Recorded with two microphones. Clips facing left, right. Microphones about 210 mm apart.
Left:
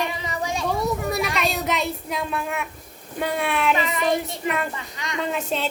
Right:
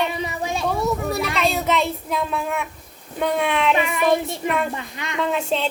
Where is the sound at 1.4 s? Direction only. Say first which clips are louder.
Right 4 dB; 5° left (ahead or behind).